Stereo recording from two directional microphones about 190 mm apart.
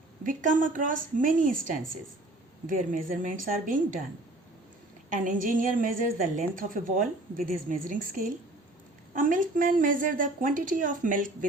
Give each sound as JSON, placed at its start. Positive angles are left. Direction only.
{"t": 0.3, "sound": "a woman's voice", "side_deg": -45}
{"t": 5.1, "sound": "a woman's voice", "side_deg": -45}